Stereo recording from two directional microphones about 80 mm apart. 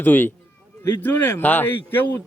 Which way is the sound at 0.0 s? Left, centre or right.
Left.